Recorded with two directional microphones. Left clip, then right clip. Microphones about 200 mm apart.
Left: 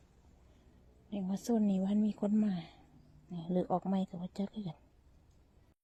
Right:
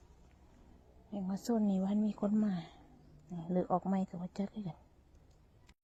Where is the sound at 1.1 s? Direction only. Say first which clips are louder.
Left 1 dB; 20° left (ahead or behind).